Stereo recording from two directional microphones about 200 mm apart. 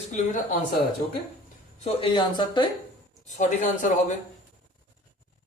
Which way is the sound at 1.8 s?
25° left (ahead or behind).